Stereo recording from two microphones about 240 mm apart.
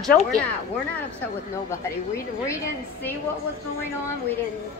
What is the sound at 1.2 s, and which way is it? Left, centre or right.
A woman's voice, centre.